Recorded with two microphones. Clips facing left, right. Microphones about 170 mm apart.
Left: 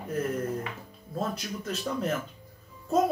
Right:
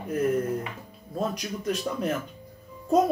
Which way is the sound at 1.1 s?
15° right (ahead or behind).